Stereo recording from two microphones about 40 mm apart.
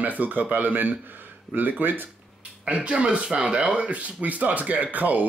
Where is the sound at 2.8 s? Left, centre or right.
Right.